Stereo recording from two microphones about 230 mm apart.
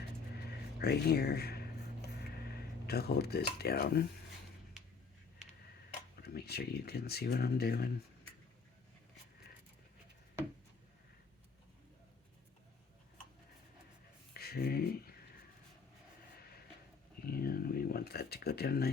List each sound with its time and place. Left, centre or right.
0.8 s speech: left
2.8 s speech: left
6.2 s speech: left
14.3 s speech: left
17.2 s a sound: left